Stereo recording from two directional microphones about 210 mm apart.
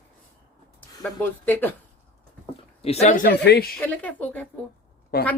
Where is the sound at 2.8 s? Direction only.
30° left (ahead or behind); by 3.7 s 50° left (ahead or behind).